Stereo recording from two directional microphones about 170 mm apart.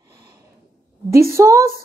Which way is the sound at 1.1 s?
15° right (ahead or behind).